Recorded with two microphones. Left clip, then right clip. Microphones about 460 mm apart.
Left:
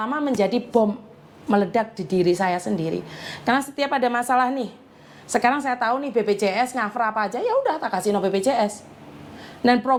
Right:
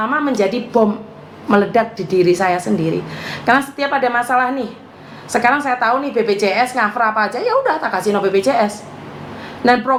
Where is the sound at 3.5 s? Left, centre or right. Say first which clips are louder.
Right 7 dB; left.